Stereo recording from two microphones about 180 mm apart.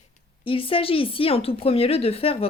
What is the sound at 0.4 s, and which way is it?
Speech, 30° left (ahead or behind).